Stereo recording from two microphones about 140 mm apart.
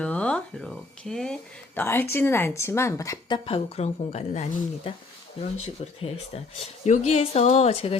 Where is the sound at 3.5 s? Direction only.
45° left (ahead or behind).